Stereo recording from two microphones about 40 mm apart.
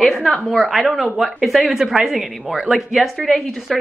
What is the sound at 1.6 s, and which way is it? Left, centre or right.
Speech, centre.